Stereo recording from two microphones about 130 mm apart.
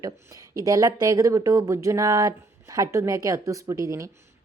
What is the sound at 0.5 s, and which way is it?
A woman's voice, 25° right (ahead or behind).